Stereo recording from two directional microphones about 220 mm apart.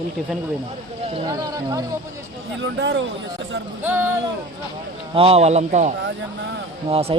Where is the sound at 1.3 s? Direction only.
15° right (ahead or behind).